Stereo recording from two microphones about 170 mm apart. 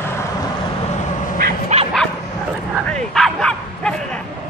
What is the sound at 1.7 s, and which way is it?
Dog, 40° right (ahead or behind).